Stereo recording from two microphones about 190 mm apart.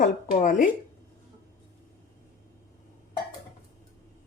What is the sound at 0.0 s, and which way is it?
Speech, 45° left (ahead or behind).